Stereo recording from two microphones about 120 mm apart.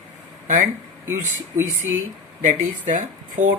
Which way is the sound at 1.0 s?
20° right (ahead or behind).